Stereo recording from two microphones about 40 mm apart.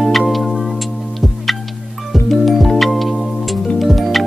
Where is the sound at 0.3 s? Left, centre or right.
Centre.